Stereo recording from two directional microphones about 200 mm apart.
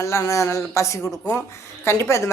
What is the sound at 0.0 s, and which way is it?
Speech, 15° left (ahead or behind).